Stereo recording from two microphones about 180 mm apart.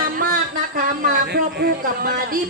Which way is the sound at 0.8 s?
55° right (ahead or behind).